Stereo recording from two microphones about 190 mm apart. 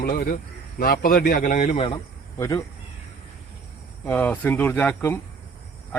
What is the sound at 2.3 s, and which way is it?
Speech, 15° left (ahead or behind).